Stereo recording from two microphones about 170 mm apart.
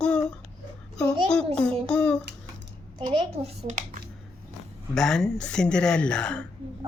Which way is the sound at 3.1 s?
35° right (ahead or behind).